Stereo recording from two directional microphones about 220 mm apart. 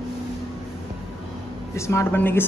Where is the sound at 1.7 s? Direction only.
15° left (ahead or behind).